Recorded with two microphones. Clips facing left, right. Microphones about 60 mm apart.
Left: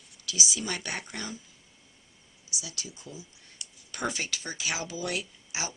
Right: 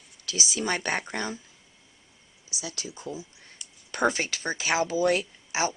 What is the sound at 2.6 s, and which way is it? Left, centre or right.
Speech, right.